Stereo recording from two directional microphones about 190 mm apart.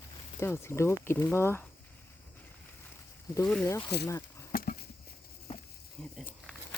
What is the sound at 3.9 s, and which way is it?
Speech, 60° left (ahead or behind).